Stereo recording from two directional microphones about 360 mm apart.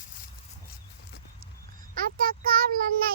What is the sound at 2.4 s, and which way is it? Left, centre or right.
Child singing, right.